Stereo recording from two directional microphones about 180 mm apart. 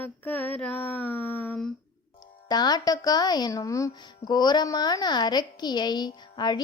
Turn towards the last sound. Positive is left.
turn(degrees=25)  # may be behind; listen again after turning